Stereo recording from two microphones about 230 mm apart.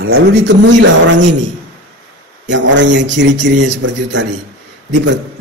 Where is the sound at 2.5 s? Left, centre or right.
Right.